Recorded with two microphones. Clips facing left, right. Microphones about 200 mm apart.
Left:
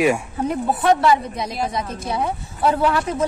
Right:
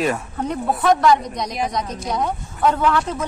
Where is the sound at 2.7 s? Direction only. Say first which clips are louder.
Even; 35° left (ahead or behind).